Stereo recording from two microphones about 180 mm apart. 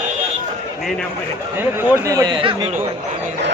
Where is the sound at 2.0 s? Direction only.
20° right (ahead or behind).